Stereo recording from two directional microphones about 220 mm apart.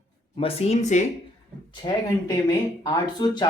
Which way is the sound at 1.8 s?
15° left (ahead or behind).